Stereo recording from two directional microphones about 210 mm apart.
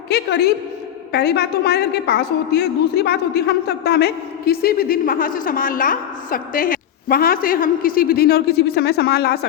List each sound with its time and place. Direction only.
0.1 s a woman's voice: 50° left (ahead or behind)